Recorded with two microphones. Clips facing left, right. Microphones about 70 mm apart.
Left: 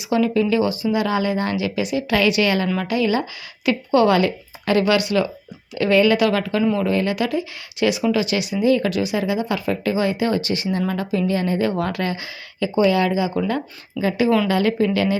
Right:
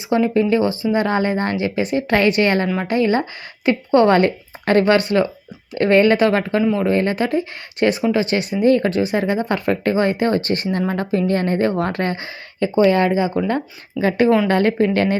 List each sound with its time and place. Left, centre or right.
0.0 s speech: right
14.0 s speech: right